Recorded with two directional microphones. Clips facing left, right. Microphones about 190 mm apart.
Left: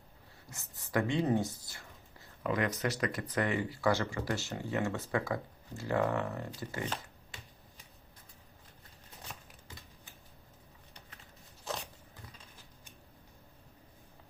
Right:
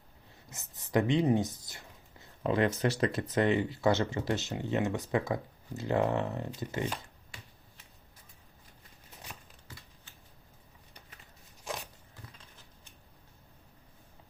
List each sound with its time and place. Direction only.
0.5 s speech: 20° right (ahead or behind)